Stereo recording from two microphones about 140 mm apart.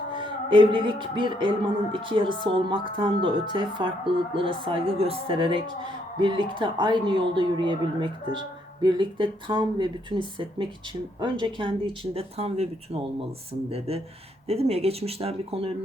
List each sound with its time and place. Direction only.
0.1 s speech: 35° right (ahead or behind)